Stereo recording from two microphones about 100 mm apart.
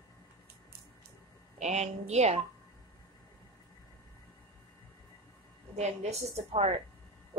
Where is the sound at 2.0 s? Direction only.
90° right.